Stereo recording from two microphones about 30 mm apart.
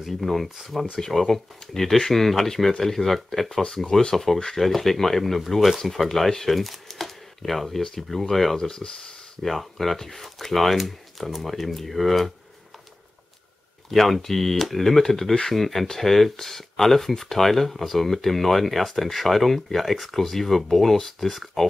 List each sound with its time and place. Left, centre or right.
0.0 s speech: centre
1.1 s speech: centre
8.6 s speech: left
9.5 s speech: centre
13.8 s speech: centre